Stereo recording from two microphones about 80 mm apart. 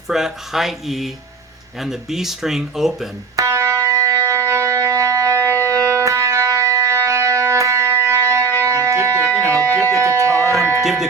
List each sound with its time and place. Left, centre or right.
0.1 s speech: centre
3.3 s music: right